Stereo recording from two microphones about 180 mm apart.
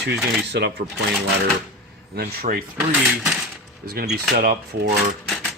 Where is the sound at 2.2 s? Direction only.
50° right (ahead or behind).